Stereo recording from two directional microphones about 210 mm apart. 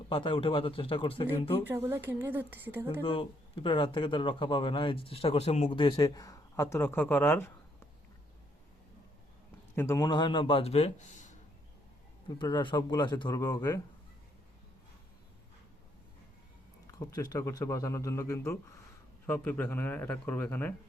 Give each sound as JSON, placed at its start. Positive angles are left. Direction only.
{"t": 0.1, "sound": "speech", "side_deg": 25}
{"t": 1.6, "sound": "speech", "side_deg": -10}
{"t": 3.0, "sound": "speech", "side_deg": 25}
{"t": 5.8, "sound": "speech", "side_deg": 20}
{"t": 9.7, "sound": "speech", "side_deg": 15}
{"t": 12.4, "sound": "speech", "side_deg": 20}
{"t": 16.8, "sound": "speech", "side_deg": 15}